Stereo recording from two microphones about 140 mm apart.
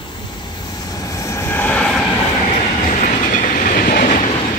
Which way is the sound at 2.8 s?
70° left (ahead or behind).